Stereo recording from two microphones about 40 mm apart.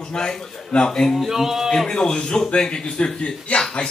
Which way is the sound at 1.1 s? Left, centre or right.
Centre.